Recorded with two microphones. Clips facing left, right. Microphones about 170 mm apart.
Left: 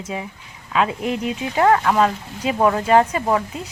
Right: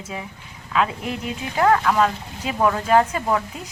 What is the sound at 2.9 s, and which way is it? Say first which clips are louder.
Speech: left 1 dB; 10° left (ahead or behind).